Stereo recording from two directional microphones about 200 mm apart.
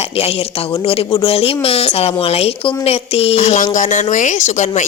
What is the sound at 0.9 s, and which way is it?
A woman's voice, 30° left (ahead or behind).